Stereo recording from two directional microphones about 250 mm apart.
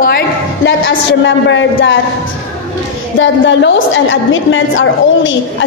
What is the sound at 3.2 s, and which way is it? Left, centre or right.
A woman's voice, left.